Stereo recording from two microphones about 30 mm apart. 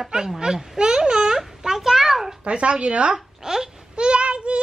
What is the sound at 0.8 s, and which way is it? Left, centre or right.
Babbling, right.